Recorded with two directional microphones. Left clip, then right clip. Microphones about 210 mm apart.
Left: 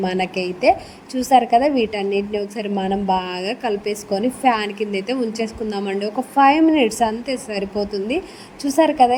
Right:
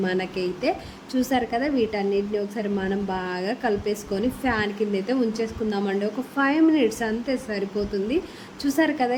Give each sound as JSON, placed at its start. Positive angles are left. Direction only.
{"t": 0.0, "sound": "a woman's voice", "side_deg": 25}